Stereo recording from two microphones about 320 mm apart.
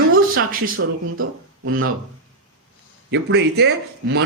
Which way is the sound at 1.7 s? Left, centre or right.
Right.